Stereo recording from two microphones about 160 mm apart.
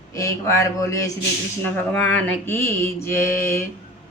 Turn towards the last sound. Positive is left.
turn(degrees=15)  # may be behind; listen again after turning